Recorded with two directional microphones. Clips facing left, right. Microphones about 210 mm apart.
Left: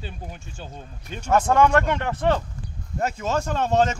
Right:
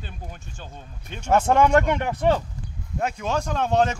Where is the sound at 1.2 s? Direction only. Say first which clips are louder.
Even; 25° right (ahead or behind).